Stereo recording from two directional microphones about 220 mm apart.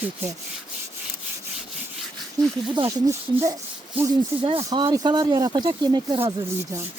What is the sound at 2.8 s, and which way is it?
Rub, 15° right (ahead or behind).